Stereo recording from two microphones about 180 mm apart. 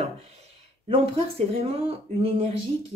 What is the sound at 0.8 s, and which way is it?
Speech, 30° right (ahead or behind).